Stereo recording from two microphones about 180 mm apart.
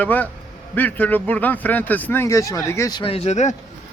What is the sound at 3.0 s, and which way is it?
Speech, 35° left (ahead or behind).